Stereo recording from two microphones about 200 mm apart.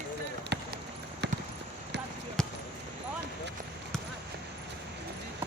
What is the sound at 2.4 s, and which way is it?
Basketball bounce, 5° left (ahead or behind).